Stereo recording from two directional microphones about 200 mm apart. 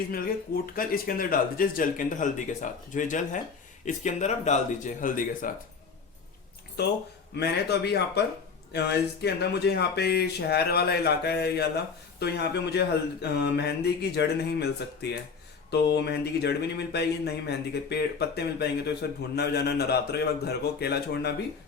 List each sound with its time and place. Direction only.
0.1 s speech: 45° left (ahead or behind)
6.8 s speech: 55° left (ahead or behind)
15.7 s speech: 55° left (ahead or behind)